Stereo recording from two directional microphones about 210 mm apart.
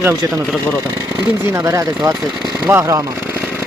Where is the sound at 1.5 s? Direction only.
15° right (ahead or behind).